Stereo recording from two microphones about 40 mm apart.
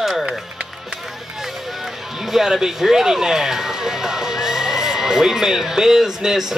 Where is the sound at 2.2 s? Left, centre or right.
Centre.